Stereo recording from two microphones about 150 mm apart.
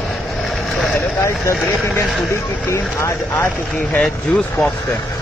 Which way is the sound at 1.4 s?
15° left (ahead or behind).